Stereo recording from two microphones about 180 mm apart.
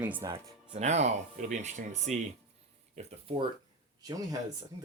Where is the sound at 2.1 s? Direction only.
Centre (ahead or behind).